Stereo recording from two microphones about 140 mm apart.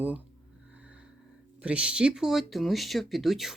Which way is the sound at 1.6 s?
5° right (ahead or behind).